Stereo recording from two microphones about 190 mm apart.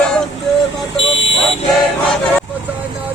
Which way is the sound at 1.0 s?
75° left (ahead or behind).